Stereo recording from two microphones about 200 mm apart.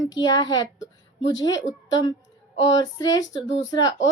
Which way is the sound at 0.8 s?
65° left (ahead or behind).